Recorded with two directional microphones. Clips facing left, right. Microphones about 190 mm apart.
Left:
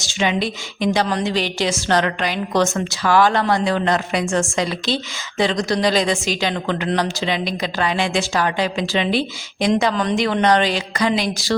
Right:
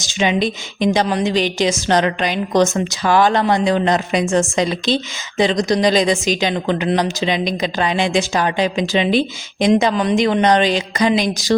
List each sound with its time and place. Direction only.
0.0 s a woman's voice: 20° right (ahead or behind)